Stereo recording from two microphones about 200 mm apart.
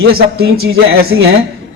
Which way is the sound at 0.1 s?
50° right (ahead or behind).